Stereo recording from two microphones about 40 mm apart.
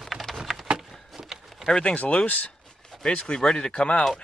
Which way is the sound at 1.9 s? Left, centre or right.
Left.